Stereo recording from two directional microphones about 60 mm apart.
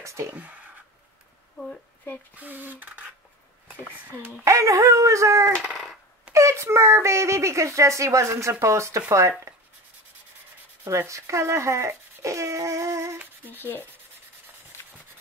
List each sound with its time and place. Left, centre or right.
0.0 s speech: right
0.3 s speech: right
2.3 s speech: right
4.5 s a woman's voice: right
10.9 s a woman's voice: right
13.2 s speech: right
13.6 s sanding: left